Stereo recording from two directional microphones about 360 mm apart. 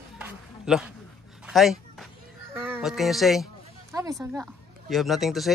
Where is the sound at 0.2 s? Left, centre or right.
Centre.